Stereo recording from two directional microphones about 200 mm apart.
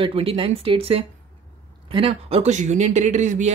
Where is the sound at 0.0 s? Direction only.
25° right (ahead or behind).